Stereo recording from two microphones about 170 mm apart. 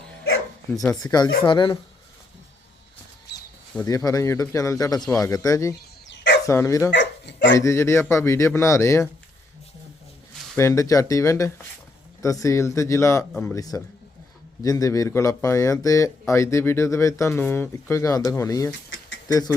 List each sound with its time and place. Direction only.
0.7 s speech: centre (ahead or behind)
1.0 s a man's voice: 25° left (ahead or behind)
3.3 s a sound: 80° left
3.8 s a man's voice: 20° left (ahead or behind)
6.1 s bird: 90° left
6.4 s speech: 20° left (ahead or behind)
6.9 s dog: 90° left
7.6 s speech: 15° left (ahead or behind)
10.6 s a man's voice: 20° left (ahead or behind)
18.9 s a sound: 90° left